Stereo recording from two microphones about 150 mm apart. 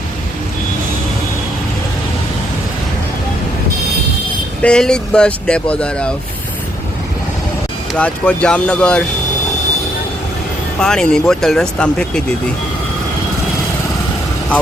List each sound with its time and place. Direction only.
4.6 s speech: 5° left (ahead or behind)
7.9 s speech: 10° left (ahead or behind)
10.8 s speech: 5° left (ahead or behind)